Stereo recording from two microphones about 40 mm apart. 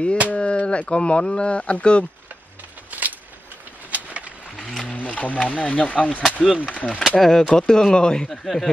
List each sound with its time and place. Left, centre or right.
0.3 s speech: left
2.9 s a sound: right
4.8 s speech: left
6.4 s speech: centre
6.7 s speech: left
7.2 s speech: centre
8.3 s speech: centre